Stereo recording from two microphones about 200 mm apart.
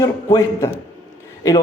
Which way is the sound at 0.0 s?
15° left (ahead or behind).